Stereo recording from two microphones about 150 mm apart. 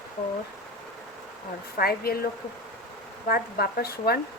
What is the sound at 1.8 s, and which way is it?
Speech, 85° left.